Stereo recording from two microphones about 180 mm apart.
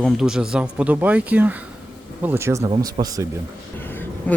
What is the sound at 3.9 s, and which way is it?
Vehicle, 10° left (ahead or behind).